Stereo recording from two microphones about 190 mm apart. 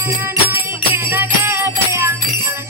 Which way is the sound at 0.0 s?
15° right (ahead or behind).